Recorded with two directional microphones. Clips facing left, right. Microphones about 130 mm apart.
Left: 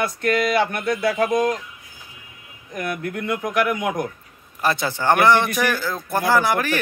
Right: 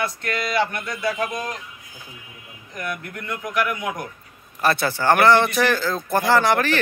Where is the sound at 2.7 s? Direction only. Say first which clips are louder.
Left 4 dB; 55° left (ahead or behind).